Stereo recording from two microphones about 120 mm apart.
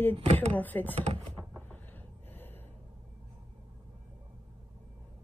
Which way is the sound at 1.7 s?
15° left (ahead or behind).